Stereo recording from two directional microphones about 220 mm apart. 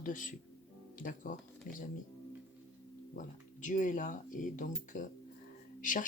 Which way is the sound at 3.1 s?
35° left (ahead or behind).